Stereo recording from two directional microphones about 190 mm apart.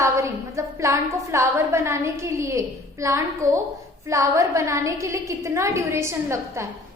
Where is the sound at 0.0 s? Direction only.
15° right (ahead or behind).